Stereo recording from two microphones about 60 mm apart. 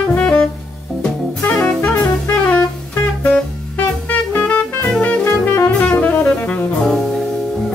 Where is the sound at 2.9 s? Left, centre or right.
Left.